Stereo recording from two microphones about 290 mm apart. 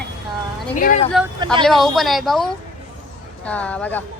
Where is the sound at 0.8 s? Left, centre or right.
Left.